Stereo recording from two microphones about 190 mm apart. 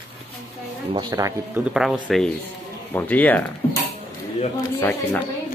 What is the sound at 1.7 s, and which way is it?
Speech, 5° right (ahead or behind).